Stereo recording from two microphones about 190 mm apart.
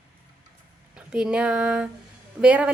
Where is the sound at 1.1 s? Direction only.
5° right (ahead or behind).